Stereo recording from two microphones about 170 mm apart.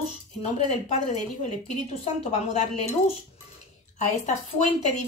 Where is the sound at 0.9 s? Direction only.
40° left (ahead or behind).